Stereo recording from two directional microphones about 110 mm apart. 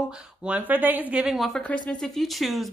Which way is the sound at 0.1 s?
10° right (ahead or behind).